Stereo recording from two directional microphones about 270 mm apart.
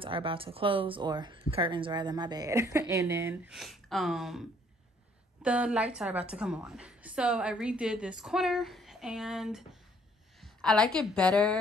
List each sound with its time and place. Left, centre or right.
0.0 s a woman's voice: centre